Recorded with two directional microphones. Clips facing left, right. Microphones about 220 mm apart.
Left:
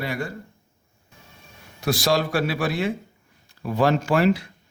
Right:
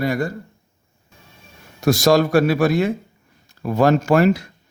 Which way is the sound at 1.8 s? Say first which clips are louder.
Right 7 dB; 45° right (ahead or behind).